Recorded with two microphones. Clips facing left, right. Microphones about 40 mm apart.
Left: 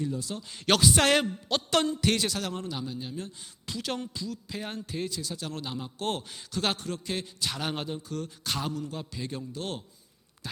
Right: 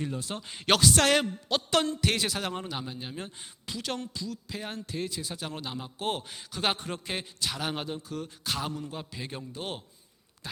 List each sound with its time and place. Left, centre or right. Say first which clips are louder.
0.0 s speech: left 1 dB; right
0.4 s a man's voice: right 2 dB; centre
0.8 s a man's voice: left 1 dB; centre
2.5 s a man's voice: left 1 dB; right
3.7 s a man's voice: left 1 dB; centre
5.1 s a man's voice: left 1 dB; centre
7.3 s a man's voice: even; centre
8.7 s a man's voice: left 2 dB; centre